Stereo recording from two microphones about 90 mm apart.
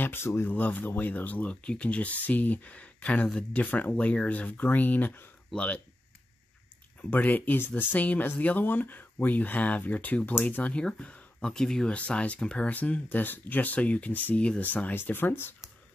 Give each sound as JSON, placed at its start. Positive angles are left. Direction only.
{"t": 0.0, "sound": "speech", "side_deg": 25}
{"t": 7.0, "sound": "speech", "side_deg": 15}